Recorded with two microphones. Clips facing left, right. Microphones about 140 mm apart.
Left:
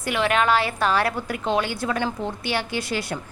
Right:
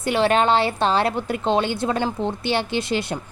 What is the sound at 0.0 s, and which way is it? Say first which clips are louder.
A woman's voice: right 3 dB; 30° right (ahead or behind).